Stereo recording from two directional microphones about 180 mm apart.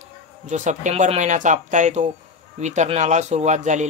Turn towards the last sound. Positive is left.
turn(degrees=-40)  # may be behind; listen again after turning